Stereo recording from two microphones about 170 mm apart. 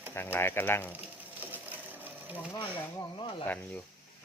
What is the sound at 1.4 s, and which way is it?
Sewing machine, 10° right (ahead or behind).